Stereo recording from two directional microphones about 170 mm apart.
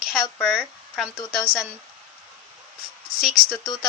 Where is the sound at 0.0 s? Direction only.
5° right (ahead or behind).